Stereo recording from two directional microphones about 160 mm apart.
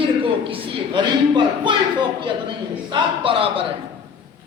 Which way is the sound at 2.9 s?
35° right (ahead or behind).